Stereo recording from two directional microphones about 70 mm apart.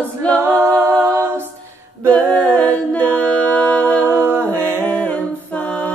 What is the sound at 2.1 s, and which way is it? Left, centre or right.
Singing, centre.